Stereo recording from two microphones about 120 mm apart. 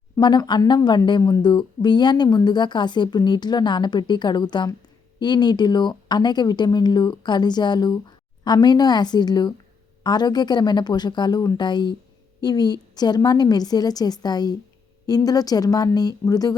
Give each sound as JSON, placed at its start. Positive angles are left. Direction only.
{"t": 0.2, "sound": "speech", "side_deg": 40}